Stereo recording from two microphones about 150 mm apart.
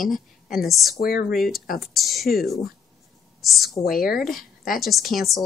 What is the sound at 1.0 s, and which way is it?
Speech, 85° left.